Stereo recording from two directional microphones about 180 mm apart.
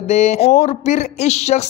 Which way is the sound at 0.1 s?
40° left (ahead or behind).